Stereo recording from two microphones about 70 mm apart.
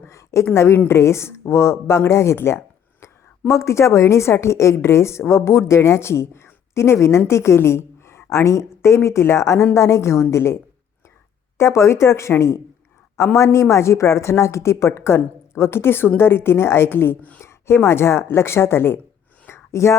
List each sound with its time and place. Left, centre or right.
0.0 s a sound: left
0.5 s a woman's voice: left
17.4 s a woman's voice: left
19.5 s whispering: left